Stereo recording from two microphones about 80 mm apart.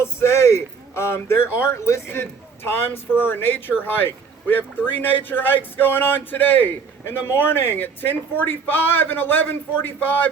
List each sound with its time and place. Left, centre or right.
0.0 s a man's voice: left